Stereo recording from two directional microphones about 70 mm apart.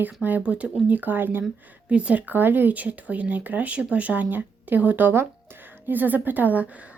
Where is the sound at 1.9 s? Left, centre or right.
Centre.